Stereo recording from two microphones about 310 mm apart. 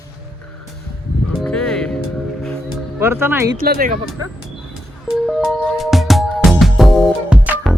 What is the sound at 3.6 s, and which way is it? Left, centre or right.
Speech, right.